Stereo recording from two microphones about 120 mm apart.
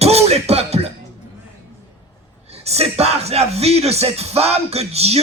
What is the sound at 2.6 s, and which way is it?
Speech, 60° right (ahead or behind).